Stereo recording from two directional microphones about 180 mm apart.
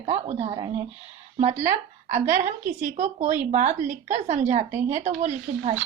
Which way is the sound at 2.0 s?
40° right (ahead or behind).